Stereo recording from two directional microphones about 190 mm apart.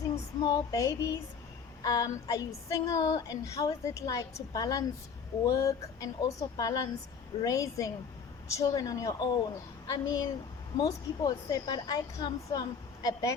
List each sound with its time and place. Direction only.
0.3 s a woman's voice: 20° left (ahead or behind)